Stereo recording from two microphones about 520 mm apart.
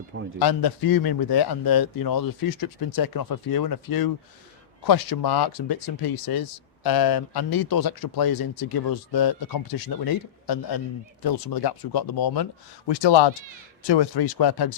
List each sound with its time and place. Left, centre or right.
0.3 s speech: left